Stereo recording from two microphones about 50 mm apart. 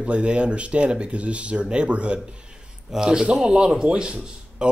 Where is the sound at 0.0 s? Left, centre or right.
Right.